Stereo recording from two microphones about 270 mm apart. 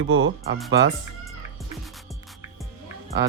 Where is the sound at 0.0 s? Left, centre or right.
Right.